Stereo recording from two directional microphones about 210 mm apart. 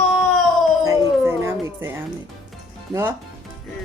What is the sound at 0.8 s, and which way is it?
Dog, 15° right (ahead or behind).